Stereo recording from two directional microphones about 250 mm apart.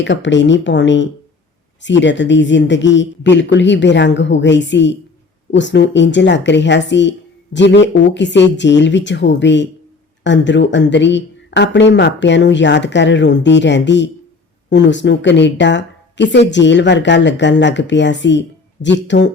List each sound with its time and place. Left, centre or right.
0.0 s speech: left